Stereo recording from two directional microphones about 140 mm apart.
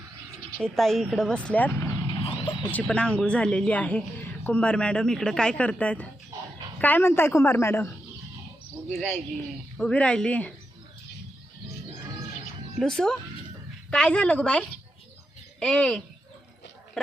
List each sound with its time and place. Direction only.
0.6 s speech: centre (ahead or behind); by 2.0 s 15° left (ahead or behind)
2.2 s vehicle: 35° left (ahead or behind)
2.7 s speech: 10° left (ahead or behind)
9.7 s speech: 5° left (ahead or behind)
12.8 s speech: 5° left (ahead or behind)
15.6 s speech: 5° left (ahead or behind)